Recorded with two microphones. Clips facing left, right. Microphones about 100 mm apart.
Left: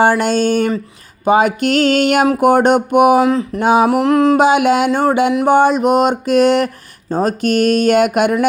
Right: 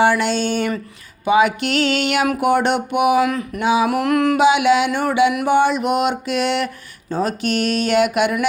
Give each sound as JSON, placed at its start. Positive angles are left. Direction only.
{"t": 0.0, "sound": "speech", "side_deg": 40}
{"t": 3.2, "sound": "music", "side_deg": 25}
{"t": 3.6, "sound": "speech", "side_deg": 45}
{"t": 3.8, "sound": "music", "side_deg": 25}
{"t": 4.4, "sound": "speech", "side_deg": 45}
{"t": 4.9, "sound": "mantra", "side_deg": 35}
{"t": 7.1, "sound": "speech", "side_deg": 40}